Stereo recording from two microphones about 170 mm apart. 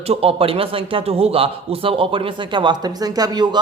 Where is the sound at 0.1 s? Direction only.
35° right (ahead or behind).